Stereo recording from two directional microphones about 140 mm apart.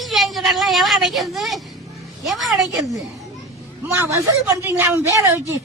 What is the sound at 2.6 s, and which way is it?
Speech, 25° right (ahead or behind).